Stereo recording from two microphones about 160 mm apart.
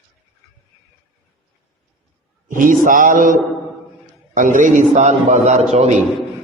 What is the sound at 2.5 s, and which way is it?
A man's voice, 55° right (ahead or behind).